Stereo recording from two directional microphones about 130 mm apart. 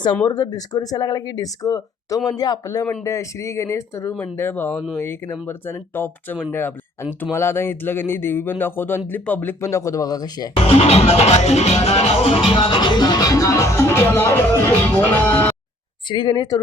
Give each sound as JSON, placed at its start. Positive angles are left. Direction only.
{"t": 0.3, "sound": "speech", "side_deg": 30}
{"t": 10.5, "sound": "music", "side_deg": 50}
{"t": 16.0, "sound": "music", "side_deg": 35}